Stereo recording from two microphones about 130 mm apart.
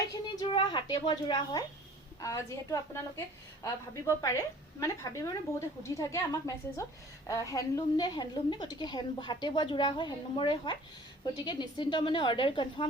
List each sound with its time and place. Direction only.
0.1 s a woman's voice: 35° left (ahead or behind)